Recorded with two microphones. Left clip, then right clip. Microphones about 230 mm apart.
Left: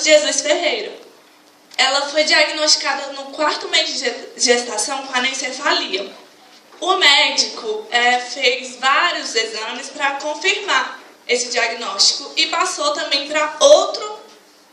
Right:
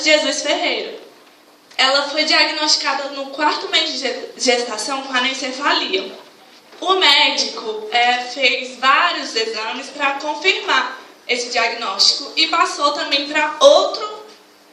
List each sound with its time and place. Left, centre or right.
0.0 s a woman's voice: left
1.7 s a woman's voice: left